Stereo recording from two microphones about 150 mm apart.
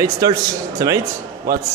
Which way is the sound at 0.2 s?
25° right (ahead or behind).